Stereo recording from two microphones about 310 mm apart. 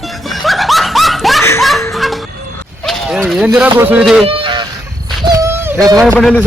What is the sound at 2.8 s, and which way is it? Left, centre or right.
Speech, centre.